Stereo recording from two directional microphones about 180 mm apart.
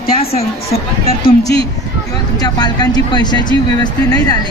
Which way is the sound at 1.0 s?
55° left (ahead or behind).